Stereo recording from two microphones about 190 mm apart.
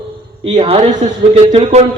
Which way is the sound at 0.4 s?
30° right (ahead or behind).